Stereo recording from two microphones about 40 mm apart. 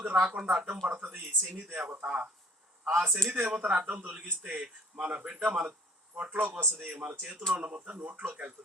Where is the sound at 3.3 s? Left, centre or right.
Right.